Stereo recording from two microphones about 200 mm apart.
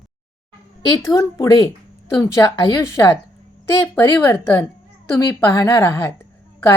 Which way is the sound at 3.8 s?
10° left (ahead or behind).